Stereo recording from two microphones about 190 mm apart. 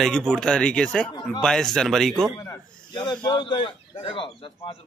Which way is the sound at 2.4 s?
25° left (ahead or behind).